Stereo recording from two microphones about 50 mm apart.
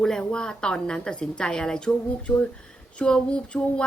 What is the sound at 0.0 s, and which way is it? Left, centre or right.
A woman's voice, centre.